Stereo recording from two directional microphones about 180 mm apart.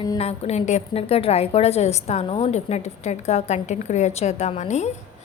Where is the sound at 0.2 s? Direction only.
35° left (ahead or behind).